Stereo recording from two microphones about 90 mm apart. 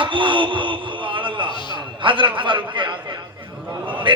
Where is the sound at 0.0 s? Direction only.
70° right (ahead or behind).